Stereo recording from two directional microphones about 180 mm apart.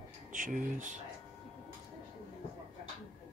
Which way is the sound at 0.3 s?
45° right (ahead or behind).